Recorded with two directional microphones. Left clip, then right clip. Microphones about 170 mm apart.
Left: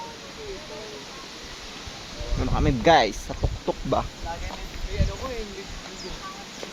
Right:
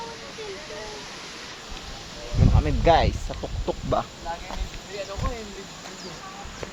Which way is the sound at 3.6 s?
25° left (ahead or behind).